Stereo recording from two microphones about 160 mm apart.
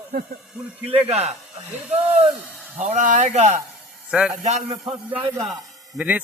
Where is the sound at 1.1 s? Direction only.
40° right (ahead or behind).